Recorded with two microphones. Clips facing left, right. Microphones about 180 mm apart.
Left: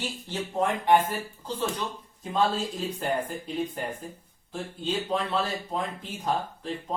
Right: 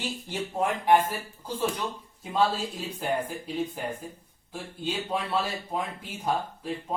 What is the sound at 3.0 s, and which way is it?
Speech, 5° right (ahead or behind).